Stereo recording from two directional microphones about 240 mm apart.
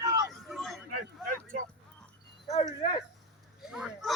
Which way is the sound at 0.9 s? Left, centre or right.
Right.